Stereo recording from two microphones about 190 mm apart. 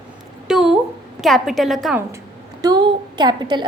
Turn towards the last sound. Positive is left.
turn(degrees=-20)  # may be behind; listen again after turning